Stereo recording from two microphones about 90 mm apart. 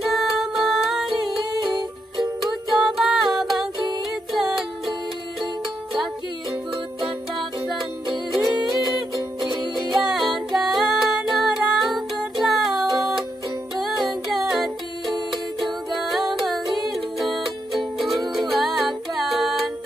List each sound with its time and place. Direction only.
0.0 s music: centre (ahead or behind)
2.7 s a capella: 5° right (ahead or behind)
4.4 s music: centre (ahead or behind)
8.3 s music: centre (ahead or behind)
15.6 s music: centre (ahead or behind)